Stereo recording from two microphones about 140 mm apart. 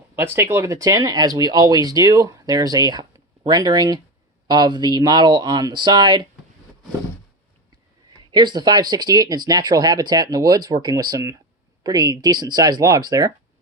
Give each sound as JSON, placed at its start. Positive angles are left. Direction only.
{"t": 0.2, "sound": "speech", "side_deg": -20}
{"t": 8.3, "sound": "speech", "side_deg": -30}